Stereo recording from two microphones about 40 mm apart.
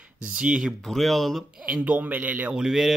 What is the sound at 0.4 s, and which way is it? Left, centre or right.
Speech, right.